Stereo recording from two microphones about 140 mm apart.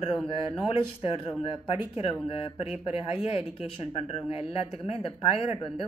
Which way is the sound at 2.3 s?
45° left (ahead or behind).